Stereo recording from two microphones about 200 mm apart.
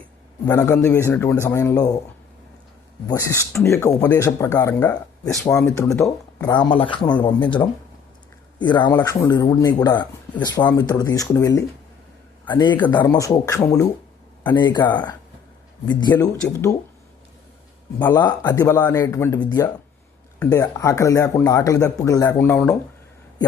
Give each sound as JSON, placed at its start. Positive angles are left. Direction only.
{"t": 0.4, "sound": "speech", "side_deg": 10}
{"t": 3.1, "sound": "speech", "side_deg": 15}
{"t": 16.1, "sound": "speech", "side_deg": 10}
{"t": 18.0, "sound": "speech", "side_deg": 20}